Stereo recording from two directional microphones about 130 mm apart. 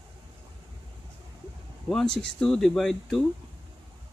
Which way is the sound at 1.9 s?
5° left (ahead or behind).